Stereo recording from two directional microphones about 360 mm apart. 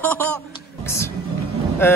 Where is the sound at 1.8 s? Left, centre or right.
Centre.